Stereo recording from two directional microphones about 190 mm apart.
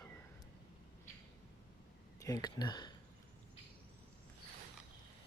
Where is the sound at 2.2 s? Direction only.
20° left (ahead or behind).